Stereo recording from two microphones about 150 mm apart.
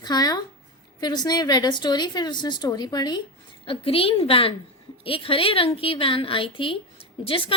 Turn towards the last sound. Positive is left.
turn(degrees=35)  # may be behind; listen again after turning